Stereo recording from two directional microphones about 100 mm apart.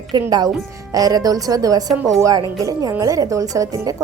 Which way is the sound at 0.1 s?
45° right (ahead or behind).